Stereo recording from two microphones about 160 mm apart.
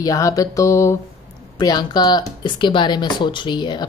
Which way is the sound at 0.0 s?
20° left (ahead or behind).